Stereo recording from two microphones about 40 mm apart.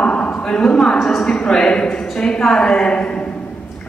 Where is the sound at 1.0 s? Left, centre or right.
Centre.